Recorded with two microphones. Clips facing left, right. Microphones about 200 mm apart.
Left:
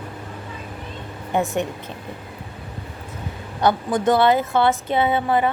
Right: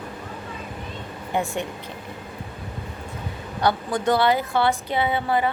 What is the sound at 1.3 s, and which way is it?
Speech, 20° left (ahead or behind).